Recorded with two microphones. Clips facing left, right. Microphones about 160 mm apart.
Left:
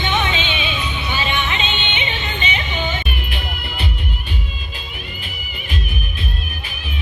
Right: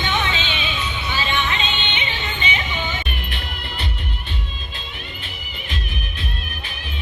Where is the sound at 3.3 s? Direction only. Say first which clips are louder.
Left 3 dB; 10° left (ahead or behind).